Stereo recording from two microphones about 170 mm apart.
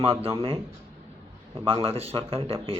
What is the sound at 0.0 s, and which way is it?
Speech, 35° right (ahead or behind).